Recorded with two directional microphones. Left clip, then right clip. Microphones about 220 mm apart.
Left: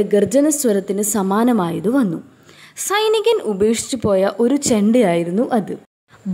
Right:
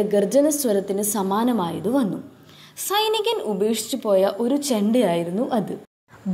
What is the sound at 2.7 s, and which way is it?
A woman's voice, 60° left (ahead or behind).